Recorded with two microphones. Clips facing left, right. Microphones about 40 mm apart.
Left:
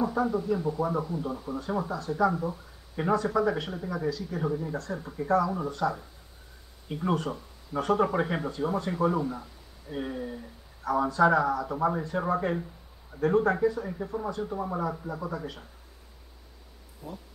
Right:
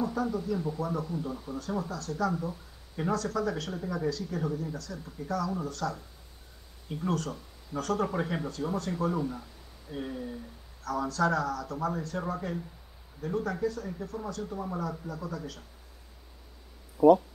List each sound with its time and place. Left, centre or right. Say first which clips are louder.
0.0 s speech: left 3 dB; centre
3.7 s speech: left 1 dB; centre
4.7 s speech: left 7 dB; left
12.4 s speech: left 6 dB; left
13.6 s speech: left 5 dB; left